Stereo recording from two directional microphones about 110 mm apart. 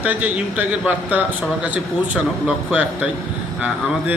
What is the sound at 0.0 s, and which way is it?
A man's voice, 15° right (ahead or behind).